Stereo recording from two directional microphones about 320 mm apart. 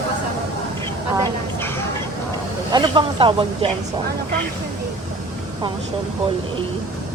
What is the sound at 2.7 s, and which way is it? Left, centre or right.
Speech, centre.